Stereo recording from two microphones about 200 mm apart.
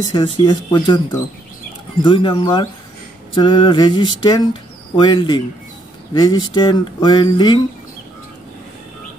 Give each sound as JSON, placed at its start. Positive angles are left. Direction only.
{"t": 0.1, "sound": "speech", "side_deg": 20}